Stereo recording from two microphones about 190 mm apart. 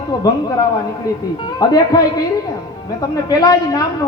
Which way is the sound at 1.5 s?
20° left (ahead or behind).